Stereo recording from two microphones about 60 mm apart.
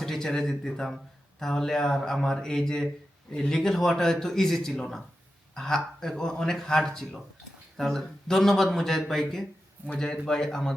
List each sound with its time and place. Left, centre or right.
0.0 s a man's voice: centre